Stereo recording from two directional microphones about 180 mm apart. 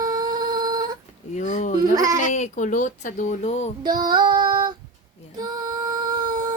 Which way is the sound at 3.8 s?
25° right (ahead or behind).